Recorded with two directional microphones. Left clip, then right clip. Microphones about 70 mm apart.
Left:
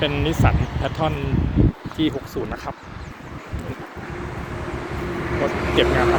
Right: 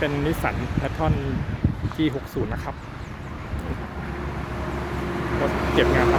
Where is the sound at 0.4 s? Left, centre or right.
Centre.